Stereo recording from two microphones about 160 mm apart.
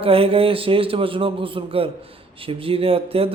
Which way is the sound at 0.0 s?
35° right (ahead or behind).